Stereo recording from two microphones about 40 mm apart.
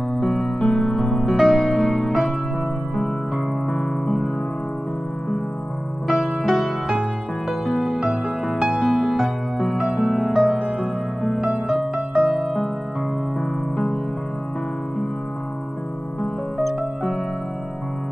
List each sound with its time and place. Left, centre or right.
0.6 s music: centre
3.7 s music: centre
6.0 s music: centre
7.4 s music: centre
10.2 s music: centre
11.5 s music: centre
16.5 s music: centre